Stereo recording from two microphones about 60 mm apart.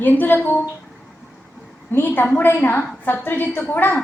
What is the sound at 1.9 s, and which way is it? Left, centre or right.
A woman's voice, left.